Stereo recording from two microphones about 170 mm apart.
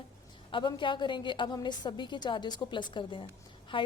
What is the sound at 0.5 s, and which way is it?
Speech, 30° left (ahead or behind).